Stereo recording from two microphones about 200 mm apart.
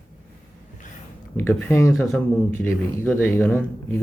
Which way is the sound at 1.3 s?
10° left (ahead or behind).